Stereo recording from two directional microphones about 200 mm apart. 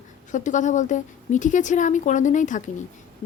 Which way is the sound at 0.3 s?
40° left (ahead or behind).